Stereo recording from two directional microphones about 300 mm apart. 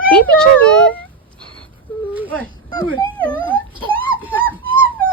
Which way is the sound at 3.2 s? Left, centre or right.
Centre.